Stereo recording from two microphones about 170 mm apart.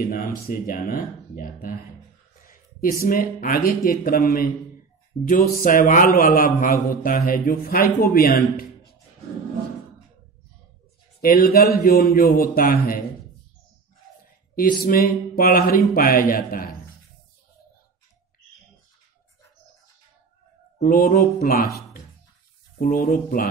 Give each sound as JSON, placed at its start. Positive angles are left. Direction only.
{"t": 0.1, "sound": "a man's voice", "side_deg": 55}
{"t": 11.1, "sound": "a man's voice", "side_deg": 60}
{"t": 14.5, "sound": "a man's voice", "side_deg": 60}
{"t": 20.8, "sound": "a man's voice", "side_deg": 60}